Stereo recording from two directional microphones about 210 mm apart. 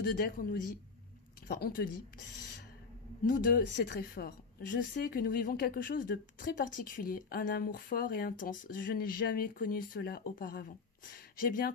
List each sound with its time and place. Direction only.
0.0 s a woman's voice: 45° left (ahead or behind)
3.3 s a woman's voice: 40° left (ahead or behind)